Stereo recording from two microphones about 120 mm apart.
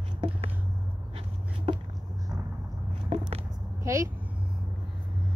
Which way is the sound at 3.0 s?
50° right (ahead or behind).